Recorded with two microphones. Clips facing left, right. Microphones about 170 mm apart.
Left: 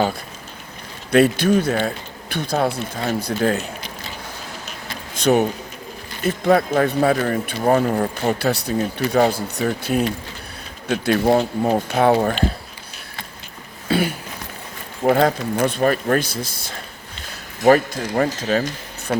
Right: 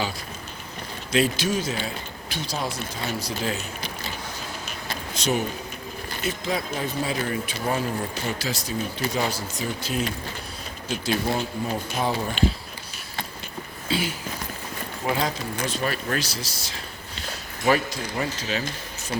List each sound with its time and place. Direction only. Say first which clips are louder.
1.1 s speech: left 8 dB; 60° left (ahead or behind)
5.1 s speech: left 9 dB; 60° left (ahead or behind)
13.8 s a sound: left 7 dB; 55° left (ahead or behind)
15.0 s speech: left 10 dB; 55° left (ahead or behind)